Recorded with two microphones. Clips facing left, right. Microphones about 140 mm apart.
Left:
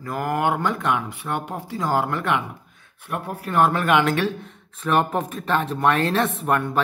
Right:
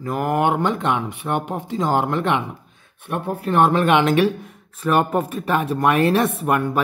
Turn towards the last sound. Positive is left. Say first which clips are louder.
# right 2 dB
turn(degrees=-5)  # may be behind; listen again after turning